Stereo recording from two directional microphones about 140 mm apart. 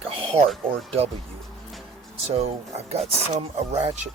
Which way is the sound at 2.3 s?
45° right (ahead or behind).